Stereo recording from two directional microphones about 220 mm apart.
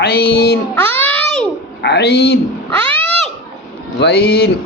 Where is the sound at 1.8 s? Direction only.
50° left (ahead or behind).